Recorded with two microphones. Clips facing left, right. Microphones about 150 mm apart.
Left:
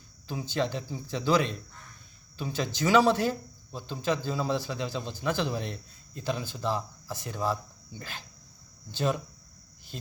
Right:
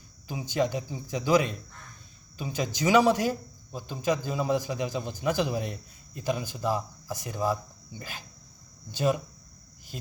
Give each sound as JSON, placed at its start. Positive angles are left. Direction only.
{"t": 0.3, "sound": "speech", "side_deg": -15}